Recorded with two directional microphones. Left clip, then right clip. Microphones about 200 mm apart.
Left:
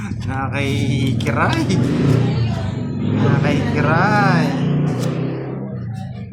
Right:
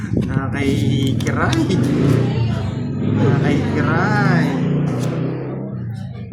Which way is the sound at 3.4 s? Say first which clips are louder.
Left 1 dB; 35° left (ahead or behind).